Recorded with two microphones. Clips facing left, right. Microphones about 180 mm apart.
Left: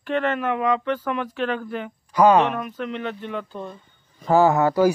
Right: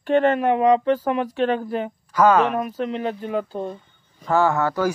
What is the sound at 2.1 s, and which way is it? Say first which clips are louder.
Speech: left 1 dB; 15° left (ahead or behind).